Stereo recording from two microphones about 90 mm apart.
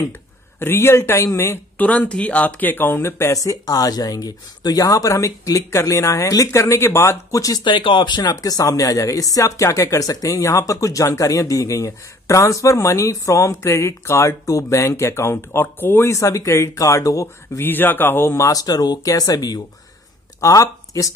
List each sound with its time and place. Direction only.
0.6 s speech: 25° left (ahead or behind)
1.8 s speech: 15° left (ahead or behind); by 7.6 s 40° left (ahead or behind)
7.6 s speech: 65° left (ahead or behind); by 16.2 s 25° left (ahead or behind)
16.2 s speech: 35° left (ahead or behind)
17.6 s speech: 20° left (ahead or behind); by 21.1 s 40° left (ahead or behind)